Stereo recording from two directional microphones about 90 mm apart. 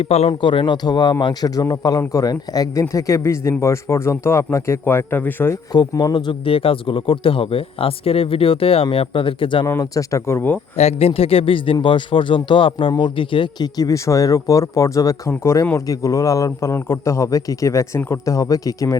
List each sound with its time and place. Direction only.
0.3 s a man's voice: 65° left (ahead or behind); by 5.5 s 25° left (ahead or behind)
5.9 s a man's voice: 40° left (ahead or behind)
6.1 s speech: 75° left (ahead or behind)
9.8 s a man's voice: 40° left (ahead or behind)
11.0 s speech: 90° left; by 13.7 s 65° left (ahead or behind)
13.7 s a man's voice: 40° left (ahead or behind)